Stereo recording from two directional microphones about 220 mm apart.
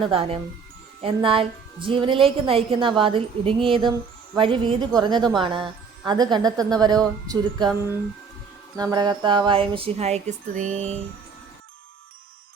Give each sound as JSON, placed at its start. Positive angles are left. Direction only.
{"t": 0.0, "sound": "speech", "side_deg": -25}